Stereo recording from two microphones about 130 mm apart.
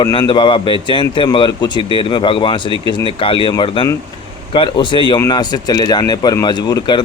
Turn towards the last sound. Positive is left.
turn(degrees=35)  # may be behind; listen again after turning